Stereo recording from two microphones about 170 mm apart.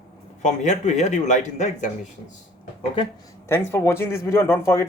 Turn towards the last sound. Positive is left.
turn(degrees=15)  # may be behind; listen again after turning